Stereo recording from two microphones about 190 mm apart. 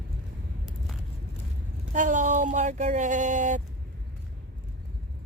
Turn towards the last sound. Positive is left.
turn(degrees=-40)  # may be behind; listen again after turning